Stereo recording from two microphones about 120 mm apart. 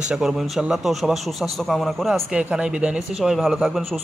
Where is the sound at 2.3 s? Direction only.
10° right (ahead or behind).